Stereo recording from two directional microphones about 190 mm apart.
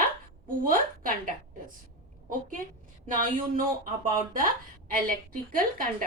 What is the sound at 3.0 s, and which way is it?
Speech, 45° right (ahead or behind).